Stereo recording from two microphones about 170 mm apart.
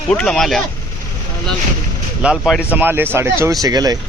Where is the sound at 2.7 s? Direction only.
10° right (ahead or behind).